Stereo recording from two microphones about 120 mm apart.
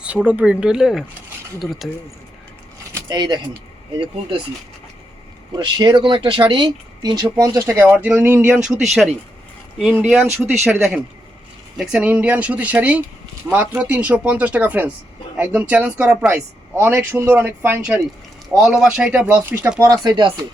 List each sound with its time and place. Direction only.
0.0 s speech: 10° right (ahead or behind)
3.1 s speech: 35° right (ahead or behind)
5.5 s speech: 35° right (ahead or behind)
7.3 s speech: 25° right (ahead or behind)
7.9 s speech: 10° right (ahead or behind)
9.7 s speech: 10° right (ahead or behind)
11.8 s speech: 5° right (ahead or behind)
20.1 s speech: 40° right (ahead or behind)